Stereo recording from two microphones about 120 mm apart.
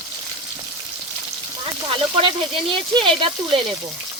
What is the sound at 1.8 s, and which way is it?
Speech, 50° right (ahead or behind).